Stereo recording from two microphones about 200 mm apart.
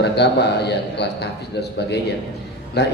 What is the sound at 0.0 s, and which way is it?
A man's voice, 55° left (ahead or behind).